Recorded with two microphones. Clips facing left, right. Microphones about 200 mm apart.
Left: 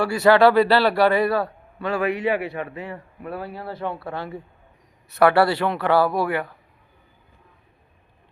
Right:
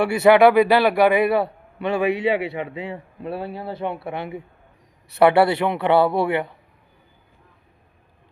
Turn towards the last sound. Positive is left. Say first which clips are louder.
# right 2 dB
turn(degrees=-25)  # may be behind; listen again after turning